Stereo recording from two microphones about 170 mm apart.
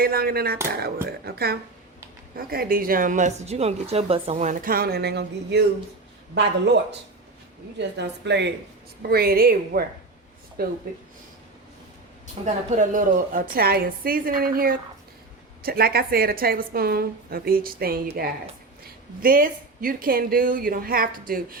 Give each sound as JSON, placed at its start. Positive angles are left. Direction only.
{"t": 0.0, "sound": "speech", "side_deg": -65}
{"t": 7.8, "sound": "a woman's voice", "side_deg": -90}
{"t": 9.0, "sound": "speech", "side_deg": -65}
{"t": 12.4, "sound": "a woman's voice", "side_deg": -40}